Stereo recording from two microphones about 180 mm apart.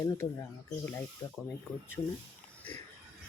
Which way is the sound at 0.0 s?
15° left (ahead or behind).